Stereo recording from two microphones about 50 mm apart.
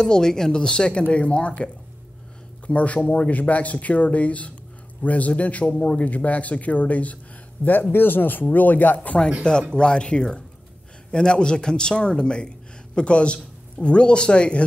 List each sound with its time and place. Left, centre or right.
0.0 s speech: centre; by 9.2 s left
9.4 s speech: centre